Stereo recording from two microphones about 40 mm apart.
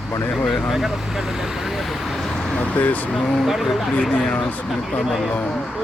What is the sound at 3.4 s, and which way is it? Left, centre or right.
Speech, centre.